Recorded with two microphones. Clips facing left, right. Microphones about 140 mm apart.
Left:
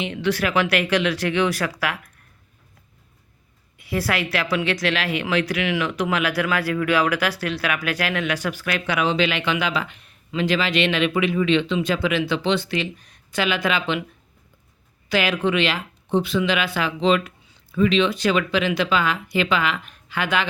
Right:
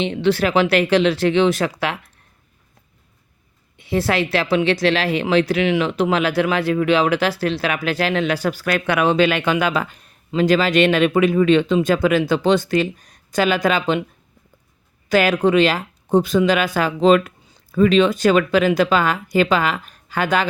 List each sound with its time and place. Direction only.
0.0 s speech: 30° right (ahead or behind)
3.8 s speech: 25° right (ahead or behind)
15.1 s speech: 45° right (ahead or behind)